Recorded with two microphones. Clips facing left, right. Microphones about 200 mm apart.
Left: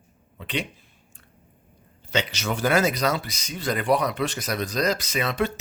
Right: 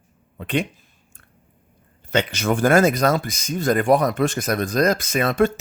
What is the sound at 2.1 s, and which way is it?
Speech, 50° right (ahead or behind).